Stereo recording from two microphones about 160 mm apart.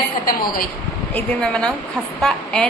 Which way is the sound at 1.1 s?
5° left (ahead or behind).